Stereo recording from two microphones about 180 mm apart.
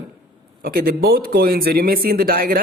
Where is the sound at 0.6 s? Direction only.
55° right (ahead or behind).